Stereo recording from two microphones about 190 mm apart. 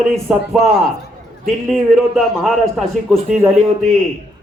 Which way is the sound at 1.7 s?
Centre (ahead or behind).